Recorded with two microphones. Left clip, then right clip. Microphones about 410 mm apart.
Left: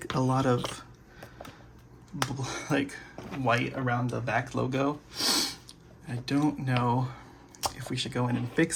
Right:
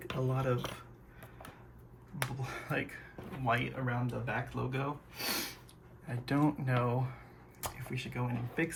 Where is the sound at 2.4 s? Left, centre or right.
Centre.